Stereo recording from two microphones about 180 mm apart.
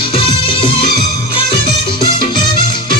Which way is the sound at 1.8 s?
25° left (ahead or behind).